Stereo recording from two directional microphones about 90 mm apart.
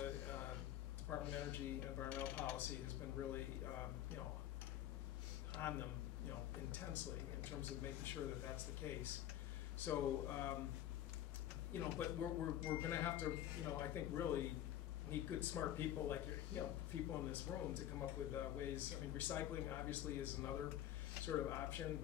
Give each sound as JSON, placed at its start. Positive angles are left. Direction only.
{"t": 0.0, "sound": "a sound", "side_deg": 20}
{"t": 1.0, "sound": "speech", "side_deg": 20}
{"t": 5.6, "sound": "speech", "side_deg": 25}
{"t": 11.7, "sound": "speech", "side_deg": 25}